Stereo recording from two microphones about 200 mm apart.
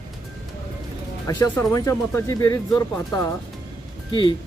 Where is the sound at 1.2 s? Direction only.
15° left (ahead or behind).